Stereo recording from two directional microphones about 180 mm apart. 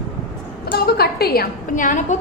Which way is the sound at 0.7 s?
60° left (ahead or behind).